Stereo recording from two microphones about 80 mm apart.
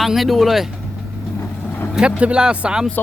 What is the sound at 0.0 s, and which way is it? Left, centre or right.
Speech, centre.